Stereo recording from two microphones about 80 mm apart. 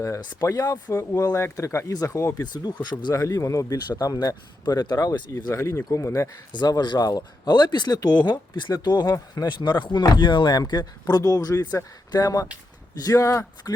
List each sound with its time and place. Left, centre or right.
0.2 s speech: left
0.4 s a man's voice: left
2.5 s speech: left
3.2 s a man's voice: left
5.7 s speech: left
6.5 s speech: left
7.0 s a man's voice: left